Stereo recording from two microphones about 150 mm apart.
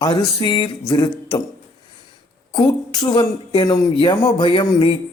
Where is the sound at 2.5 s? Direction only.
30° left (ahead or behind).